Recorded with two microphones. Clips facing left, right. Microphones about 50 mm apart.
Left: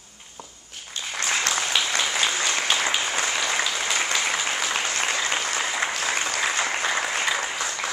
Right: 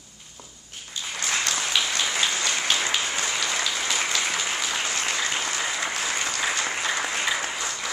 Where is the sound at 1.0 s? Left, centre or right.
Left.